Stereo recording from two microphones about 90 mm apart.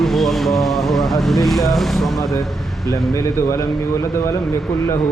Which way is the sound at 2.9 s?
35° left (ahead or behind).